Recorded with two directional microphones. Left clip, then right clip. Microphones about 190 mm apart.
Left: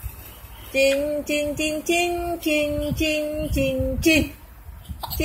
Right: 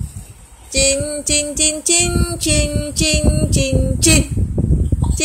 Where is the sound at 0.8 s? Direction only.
15° right (ahead or behind).